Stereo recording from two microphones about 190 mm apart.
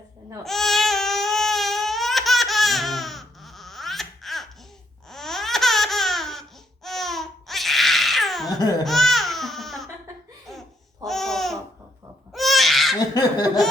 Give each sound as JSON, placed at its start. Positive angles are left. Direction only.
{"t": 0.4, "sound": "baby cry", "side_deg": 0}
{"t": 5.0, "sound": "laughter", "side_deg": 0}
{"t": 6.8, "sound": "babbling", "side_deg": 0}
{"t": 8.8, "sound": "baby cry", "side_deg": 0}
{"t": 10.5, "sound": "laughter", "side_deg": 0}
{"t": 11.0, "sound": "babbling", "side_deg": 0}
{"t": 12.3, "sound": "a sound", "side_deg": 0}
{"t": 13.1, "sound": "laughter", "side_deg": 20}